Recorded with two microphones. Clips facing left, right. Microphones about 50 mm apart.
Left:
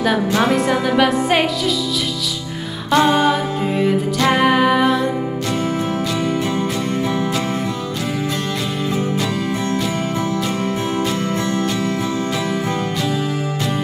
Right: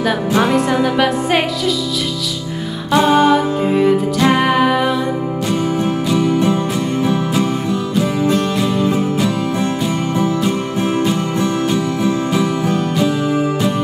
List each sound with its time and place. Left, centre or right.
0.4 s music: centre
2.9 s music: centre
11.1 s music: centre